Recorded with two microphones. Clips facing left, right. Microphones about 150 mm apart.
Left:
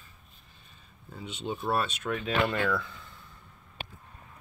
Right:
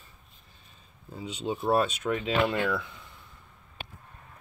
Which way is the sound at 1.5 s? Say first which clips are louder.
Right 4 dB; 20° right (ahead or behind).